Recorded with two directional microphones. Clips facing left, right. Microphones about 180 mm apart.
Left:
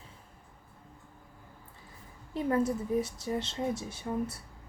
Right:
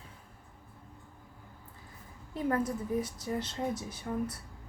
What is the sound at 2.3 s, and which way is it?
A woman's voice, 25° left (ahead or behind).